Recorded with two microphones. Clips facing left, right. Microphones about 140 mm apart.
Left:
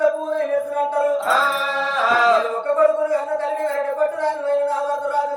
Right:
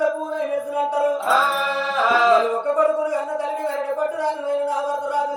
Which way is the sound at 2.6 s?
10° right (ahead or behind).